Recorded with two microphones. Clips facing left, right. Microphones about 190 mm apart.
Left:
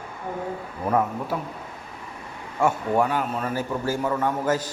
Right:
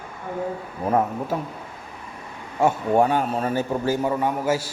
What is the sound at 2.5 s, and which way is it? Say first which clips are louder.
A man's voice: right 3 dB; 20° right (ahead or behind).